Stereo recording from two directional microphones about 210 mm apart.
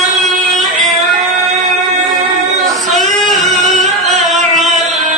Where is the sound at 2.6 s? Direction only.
Centre (ahead or behind).